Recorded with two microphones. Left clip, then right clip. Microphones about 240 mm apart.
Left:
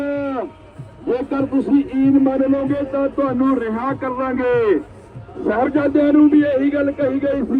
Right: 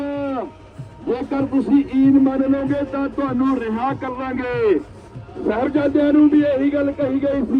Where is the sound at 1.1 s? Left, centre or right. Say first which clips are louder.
Left 2 dB; centre.